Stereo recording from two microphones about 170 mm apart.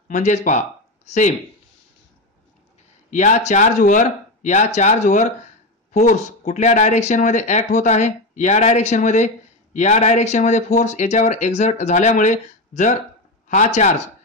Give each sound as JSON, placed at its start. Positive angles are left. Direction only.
{"t": 0.1, "sound": "speech", "side_deg": 45}
{"t": 3.1, "sound": "speech", "side_deg": 45}